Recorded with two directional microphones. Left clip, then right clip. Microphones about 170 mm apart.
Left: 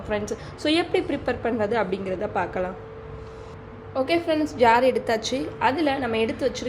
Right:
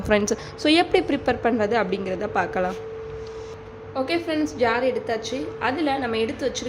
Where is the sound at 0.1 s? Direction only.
35° right (ahead or behind).